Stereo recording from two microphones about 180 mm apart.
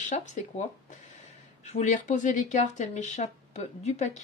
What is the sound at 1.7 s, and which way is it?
Speech, 40° left (ahead or behind).